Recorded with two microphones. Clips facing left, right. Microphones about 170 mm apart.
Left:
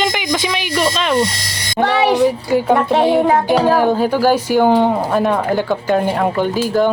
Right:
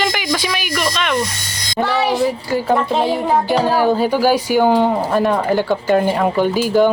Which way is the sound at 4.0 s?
10° right (ahead or behind).